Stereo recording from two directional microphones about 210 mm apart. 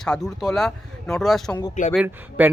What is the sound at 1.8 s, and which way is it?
Speech, 35° left (ahead or behind).